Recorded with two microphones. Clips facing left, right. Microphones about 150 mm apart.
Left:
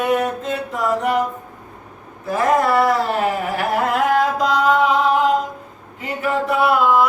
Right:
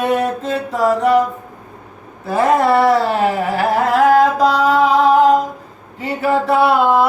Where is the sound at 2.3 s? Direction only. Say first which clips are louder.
Right 3 dB; 30° right (ahead or behind).